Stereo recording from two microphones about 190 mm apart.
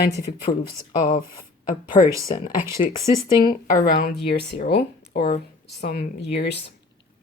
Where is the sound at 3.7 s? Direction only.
50° left (ahead or behind).